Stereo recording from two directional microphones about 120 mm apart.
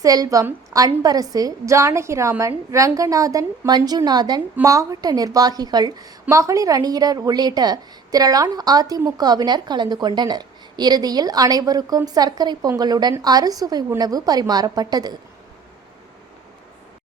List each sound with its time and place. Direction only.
0.0 s a woman's voice: 30° right (ahead or behind)